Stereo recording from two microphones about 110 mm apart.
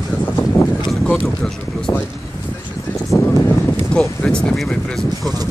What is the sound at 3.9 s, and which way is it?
Speech, 5° left (ahead or behind).